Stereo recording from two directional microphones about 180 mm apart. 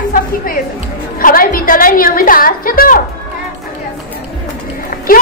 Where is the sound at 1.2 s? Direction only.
50° left (ahead or behind).